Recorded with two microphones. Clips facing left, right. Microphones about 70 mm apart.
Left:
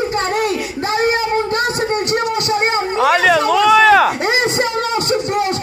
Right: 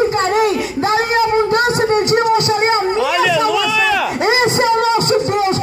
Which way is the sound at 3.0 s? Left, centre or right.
Left.